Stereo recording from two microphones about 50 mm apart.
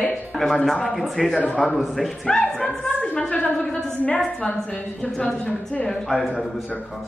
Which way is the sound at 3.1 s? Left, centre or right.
Left.